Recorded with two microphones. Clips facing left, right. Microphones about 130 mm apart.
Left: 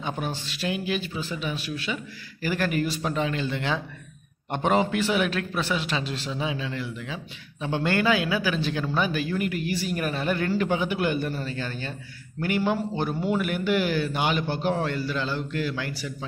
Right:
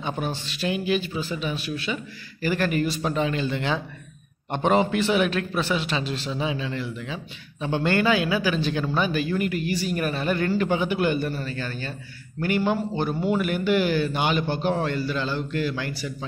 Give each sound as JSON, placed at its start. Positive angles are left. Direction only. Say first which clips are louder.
{"t": 0.0, "sound": "speech", "louder": "right 2 dB", "side_deg": 5}
{"t": 2.4, "sound": "speech", "louder": "right 2 dB", "side_deg": 5}
{"t": 3.0, "sound": "speech", "louder": "right 2 dB", "side_deg": -5}
{"t": 11.3, "sound": "a man's voice", "louder": "right 1 dB", "side_deg": 20}
{"t": 12.4, "sound": "speech", "louder": "right 2 dB", "side_deg": 5}